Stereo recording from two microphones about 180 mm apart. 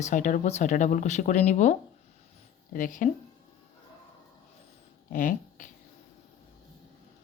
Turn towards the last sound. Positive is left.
turn(degrees=50)  # may be behind; listen again after turning